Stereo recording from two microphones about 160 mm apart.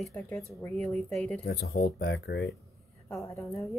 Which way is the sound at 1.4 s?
75° left (ahead or behind).